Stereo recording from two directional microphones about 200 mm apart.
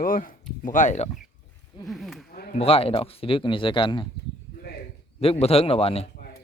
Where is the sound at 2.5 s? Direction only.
30° left (ahead or behind).